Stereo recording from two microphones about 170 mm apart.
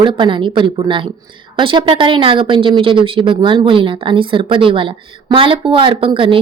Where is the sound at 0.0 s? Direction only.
30° right (ahead or behind).